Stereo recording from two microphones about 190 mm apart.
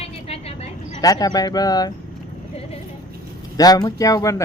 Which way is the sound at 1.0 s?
20° left (ahead or behind).